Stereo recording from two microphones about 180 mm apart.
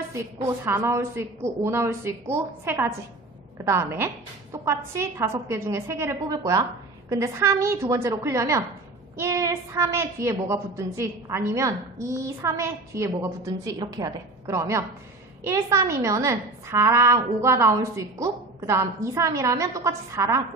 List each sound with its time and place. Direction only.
0.1 s a woman's voice: 15° right (ahead or behind)